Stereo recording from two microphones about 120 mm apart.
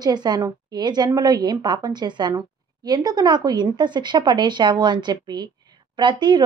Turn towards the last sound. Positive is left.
turn(degrees=-40)  # may be behind; listen again after turning